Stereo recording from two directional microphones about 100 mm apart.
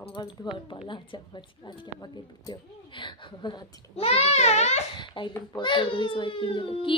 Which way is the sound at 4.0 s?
90° left.